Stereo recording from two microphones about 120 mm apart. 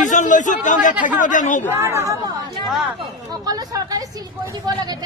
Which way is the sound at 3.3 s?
35° right (ahead or behind).